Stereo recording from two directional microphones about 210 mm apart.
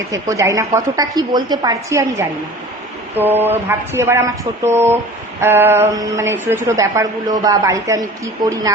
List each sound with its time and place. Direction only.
0.1 s a woman's voice: 15° right (ahead or behind)